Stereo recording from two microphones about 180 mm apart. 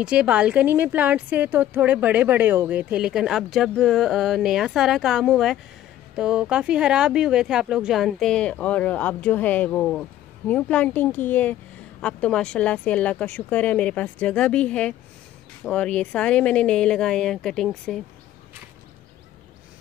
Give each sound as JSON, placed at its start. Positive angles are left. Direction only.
{"t": 0.0, "sound": "speech", "side_deg": -5}